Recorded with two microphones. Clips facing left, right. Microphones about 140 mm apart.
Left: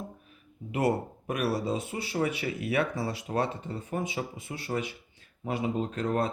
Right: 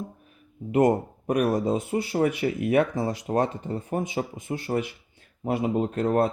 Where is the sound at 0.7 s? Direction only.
45° right (ahead or behind).